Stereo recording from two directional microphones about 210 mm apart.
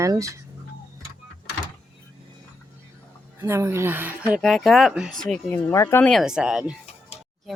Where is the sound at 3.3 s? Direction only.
10° right (ahead or behind).